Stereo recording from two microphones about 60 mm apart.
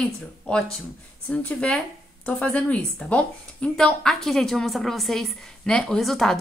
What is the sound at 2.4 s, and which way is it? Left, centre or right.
A woman's voice, left.